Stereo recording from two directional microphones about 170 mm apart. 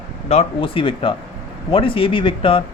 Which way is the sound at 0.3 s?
35° left (ahead or behind).